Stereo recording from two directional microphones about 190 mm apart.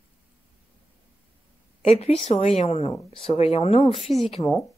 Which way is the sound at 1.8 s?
35° left (ahead or behind).